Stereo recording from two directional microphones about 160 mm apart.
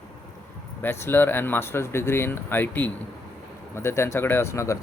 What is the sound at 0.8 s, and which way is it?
Speech, 15° left (ahead or behind).